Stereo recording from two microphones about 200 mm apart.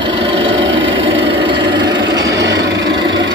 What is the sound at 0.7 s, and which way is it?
Engine, 70° right (ahead or behind).